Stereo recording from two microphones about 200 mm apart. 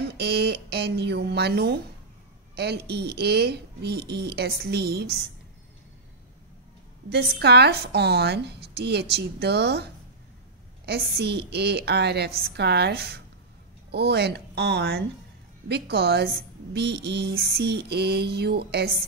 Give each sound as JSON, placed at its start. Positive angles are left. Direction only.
{"t": 0.0, "sound": "a woman's voice", "side_deg": -55}
{"t": 7.1, "sound": "a woman's voice", "side_deg": -55}
{"t": 10.9, "sound": "a woman's voice", "side_deg": -55}